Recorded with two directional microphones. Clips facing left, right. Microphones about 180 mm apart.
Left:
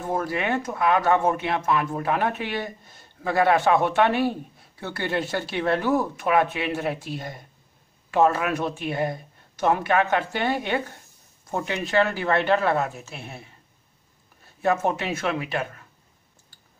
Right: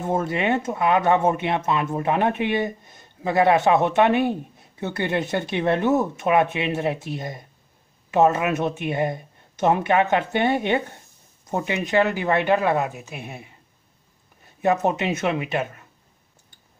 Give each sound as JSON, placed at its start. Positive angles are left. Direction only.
{"t": 0.0, "sound": "speech", "side_deg": -25}
{"t": 14.6, "sound": "speech", "side_deg": -20}